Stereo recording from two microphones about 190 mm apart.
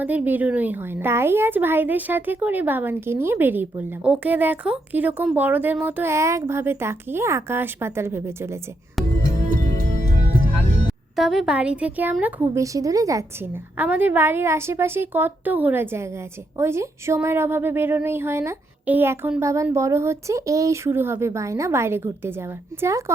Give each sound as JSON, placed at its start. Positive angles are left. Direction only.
{"t": 0.0, "sound": "a woman's voice", "side_deg": -10}
{"t": 9.4, "sound": "music", "side_deg": -40}
{"t": 11.2, "sound": "a woman's voice", "side_deg": 0}